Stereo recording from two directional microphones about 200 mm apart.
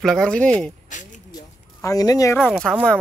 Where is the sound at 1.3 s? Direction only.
15° left (ahead or behind).